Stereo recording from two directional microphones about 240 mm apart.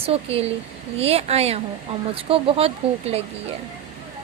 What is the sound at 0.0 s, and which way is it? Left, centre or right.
A woman's voice, right.